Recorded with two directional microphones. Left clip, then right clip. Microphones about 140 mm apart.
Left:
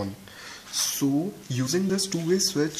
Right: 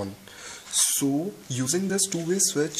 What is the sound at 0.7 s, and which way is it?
Speech, 40° right (ahead or behind).